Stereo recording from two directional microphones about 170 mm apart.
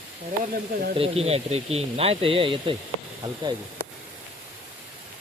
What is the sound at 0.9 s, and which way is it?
Speech, 35° right (ahead or behind).